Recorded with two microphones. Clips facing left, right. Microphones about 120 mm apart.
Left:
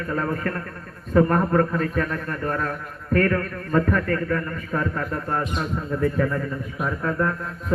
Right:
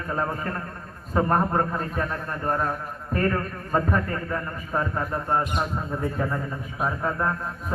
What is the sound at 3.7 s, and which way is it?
A man's voice, 25° right (ahead or behind).